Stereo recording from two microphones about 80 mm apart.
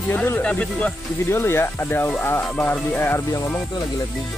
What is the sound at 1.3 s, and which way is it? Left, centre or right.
Speech, left.